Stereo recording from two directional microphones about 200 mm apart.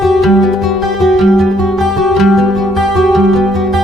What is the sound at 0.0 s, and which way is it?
Music, centre (ahead or behind).